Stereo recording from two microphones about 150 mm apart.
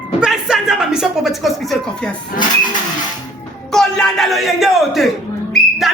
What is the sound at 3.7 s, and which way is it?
Speech, 5° left (ahead or behind).